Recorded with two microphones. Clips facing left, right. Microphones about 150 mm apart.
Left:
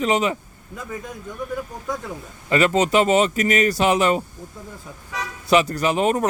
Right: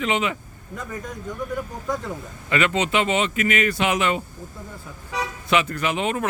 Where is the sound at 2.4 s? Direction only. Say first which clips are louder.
Left 4 dB; 35° left (ahead or behind).